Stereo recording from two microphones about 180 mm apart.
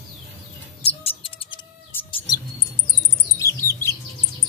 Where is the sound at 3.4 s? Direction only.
15° left (ahead or behind).